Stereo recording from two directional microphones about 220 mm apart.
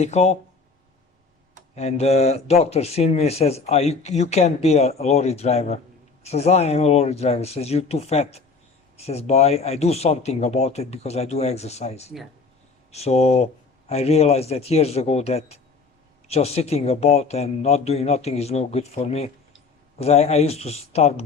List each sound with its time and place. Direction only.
0.0 s speech: 30° left (ahead or behind)
1.7 s speech: 30° left (ahead or behind)